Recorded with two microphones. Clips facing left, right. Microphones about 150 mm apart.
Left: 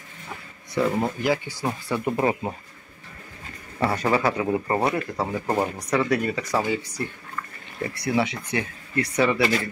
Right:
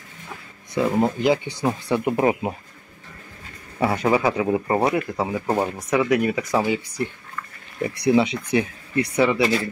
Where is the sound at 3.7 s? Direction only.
15° right (ahead or behind).